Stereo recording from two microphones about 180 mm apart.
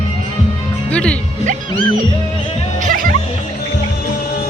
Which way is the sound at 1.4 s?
45° right (ahead or behind).